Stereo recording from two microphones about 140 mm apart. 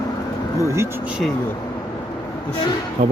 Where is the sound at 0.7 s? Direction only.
20° right (ahead or behind).